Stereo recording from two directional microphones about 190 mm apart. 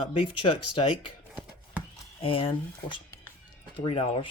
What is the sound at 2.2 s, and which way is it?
Speech, 30° left (ahead or behind).